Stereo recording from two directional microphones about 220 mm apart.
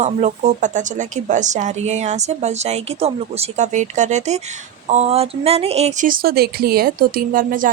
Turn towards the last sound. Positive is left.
turn(degrees=-40)  # may be behind; listen again after turning